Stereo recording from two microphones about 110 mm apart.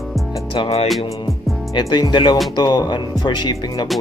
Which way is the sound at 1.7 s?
40° left (ahead or behind).